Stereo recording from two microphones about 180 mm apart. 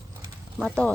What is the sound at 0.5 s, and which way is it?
Speech, 5° left (ahead or behind).